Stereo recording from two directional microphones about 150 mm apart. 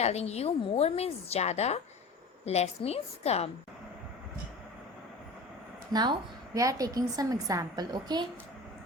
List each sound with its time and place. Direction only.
0.0 s a woman's voice: 45° left (ahead or behind)
5.9 s a woman's voice: 25° right (ahead or behind)